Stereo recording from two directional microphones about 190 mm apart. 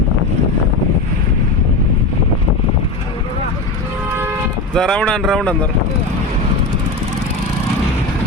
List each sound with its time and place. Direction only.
4.7 s speech: 5° left (ahead or behind)